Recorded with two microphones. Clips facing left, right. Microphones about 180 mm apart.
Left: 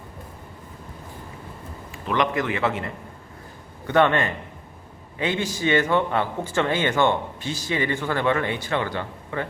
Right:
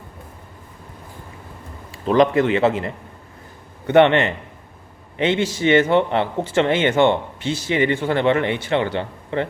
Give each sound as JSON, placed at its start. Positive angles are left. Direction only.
{"t": 2.0, "sound": "a man's voice", "side_deg": -30}